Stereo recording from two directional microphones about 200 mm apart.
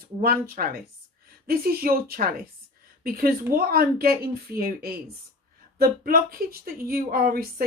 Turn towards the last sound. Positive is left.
turn(degrees=-45)  # may be behind; listen again after turning